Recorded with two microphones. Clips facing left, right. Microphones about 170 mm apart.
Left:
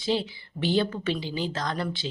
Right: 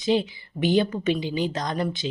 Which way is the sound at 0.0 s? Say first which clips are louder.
Right 4 dB; 15° right (ahead or behind).